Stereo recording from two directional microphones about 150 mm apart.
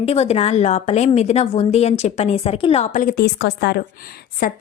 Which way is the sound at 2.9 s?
65° left (ahead or behind).